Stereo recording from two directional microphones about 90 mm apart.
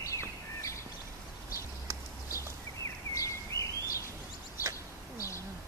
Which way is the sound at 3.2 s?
35° left (ahead or behind).